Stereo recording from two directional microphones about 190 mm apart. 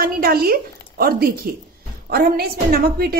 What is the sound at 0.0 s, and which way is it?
A woman's voice, 55° right (ahead or behind).